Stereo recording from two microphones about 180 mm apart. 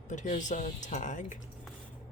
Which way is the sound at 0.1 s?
45° left (ahead or behind).